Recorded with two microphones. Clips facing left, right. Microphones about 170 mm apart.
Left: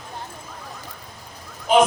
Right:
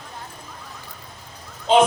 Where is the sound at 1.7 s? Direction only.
25° right (ahead or behind).